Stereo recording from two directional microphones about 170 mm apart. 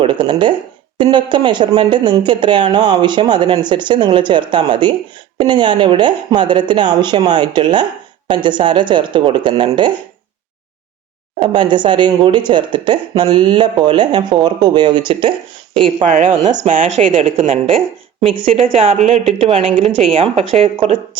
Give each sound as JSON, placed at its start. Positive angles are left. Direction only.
{"t": 0.0, "sound": "speech", "side_deg": -30}
{"t": 11.3, "sound": "speech", "side_deg": -30}
{"t": 16.0, "sound": "speech", "side_deg": -50}
{"t": 17.2, "sound": "speech", "side_deg": -35}
{"t": 17.7, "sound": "speech", "side_deg": 0}
{"t": 18.6, "sound": "speech", "side_deg": -35}
{"t": 19.0, "sound": "speech", "side_deg": 0}
{"t": 19.4, "sound": "speech", "side_deg": -35}